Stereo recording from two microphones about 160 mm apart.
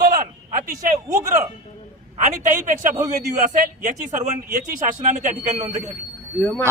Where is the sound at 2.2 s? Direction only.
50° right (ahead or behind).